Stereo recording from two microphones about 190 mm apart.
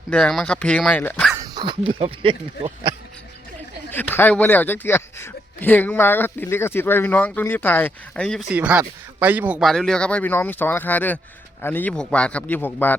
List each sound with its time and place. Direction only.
0.1 s speech: 5° left (ahead or behind)
1.3 s speech: 20° right (ahead or behind)
3.9 s speech: 10° left (ahead or behind)